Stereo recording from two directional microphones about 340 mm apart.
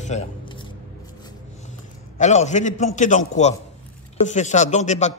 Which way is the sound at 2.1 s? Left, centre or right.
Centre.